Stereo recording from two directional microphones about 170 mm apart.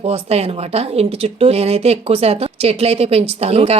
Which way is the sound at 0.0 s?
35° right (ahead or behind).